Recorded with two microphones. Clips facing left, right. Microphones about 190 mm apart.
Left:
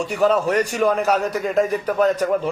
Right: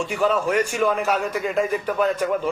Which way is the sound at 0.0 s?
40° left (ahead or behind).